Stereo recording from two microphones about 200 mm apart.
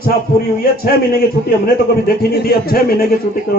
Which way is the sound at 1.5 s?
50° left (ahead or behind).